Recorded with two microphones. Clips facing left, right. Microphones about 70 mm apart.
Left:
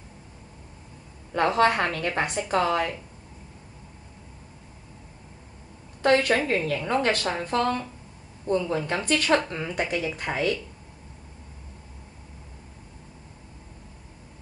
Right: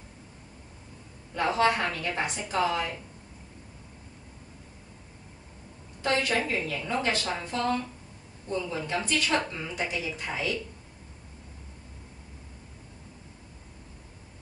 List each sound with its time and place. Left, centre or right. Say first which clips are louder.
1.3 s a woman's voice: left 4 dB; left
6.0 s a woman's voice: left 6 dB; left